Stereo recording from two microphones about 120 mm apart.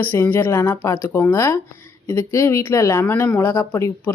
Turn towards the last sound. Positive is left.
turn(degrees=25)  # may be behind; listen again after turning